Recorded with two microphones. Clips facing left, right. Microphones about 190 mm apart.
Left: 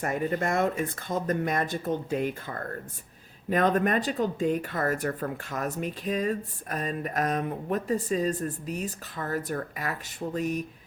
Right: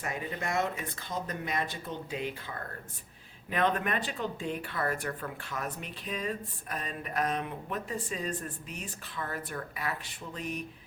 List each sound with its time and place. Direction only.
0.0 s speech: 50° left (ahead or behind)